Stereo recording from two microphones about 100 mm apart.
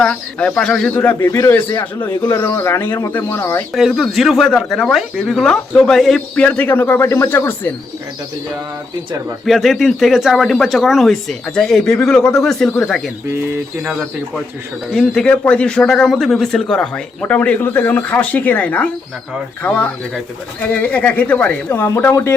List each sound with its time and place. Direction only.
0.0 s speech: 10° left (ahead or behind)
1.3 s speech: 25° left (ahead or behind)
3.8 s speech: centre (ahead or behind); by 7.7 s 20° left (ahead or behind)
9.5 s speech: centre (ahead or behind)
14.9 s speech: 5° left (ahead or behind)
22.1 s speech: 30° left (ahead or behind)